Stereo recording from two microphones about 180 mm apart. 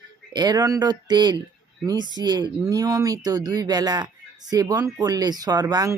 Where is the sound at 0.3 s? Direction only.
25° right (ahead or behind).